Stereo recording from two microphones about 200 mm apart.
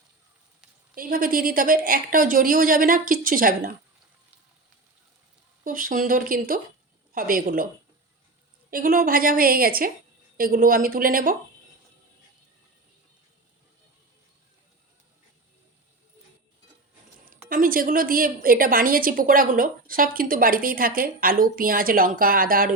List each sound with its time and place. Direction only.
0.9 s a woman's voice: 45° right (ahead or behind)
5.6 s a woman's voice: 45° right (ahead or behind)
8.7 s a woman's voice: 45° right (ahead or behind)
17.5 s a woman's voice: 45° right (ahead or behind)